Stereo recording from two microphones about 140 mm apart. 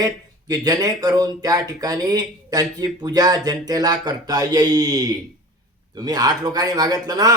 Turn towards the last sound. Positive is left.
turn(degrees=-25)  # may be behind; listen again after turning